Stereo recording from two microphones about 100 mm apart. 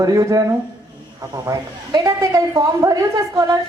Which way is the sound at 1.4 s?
35° right (ahead or behind).